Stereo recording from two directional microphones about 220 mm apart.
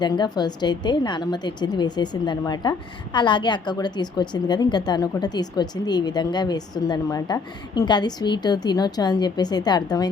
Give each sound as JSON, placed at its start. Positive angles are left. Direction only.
{"t": 0.0, "sound": "a woman's voice", "side_deg": 20}